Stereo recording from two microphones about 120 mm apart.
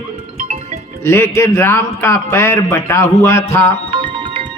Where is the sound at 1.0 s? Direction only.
20° left (ahead or behind).